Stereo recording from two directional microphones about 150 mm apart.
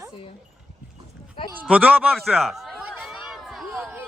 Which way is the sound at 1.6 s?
10° right (ahead or behind).